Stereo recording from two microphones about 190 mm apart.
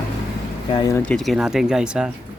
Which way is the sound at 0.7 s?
15° left (ahead or behind).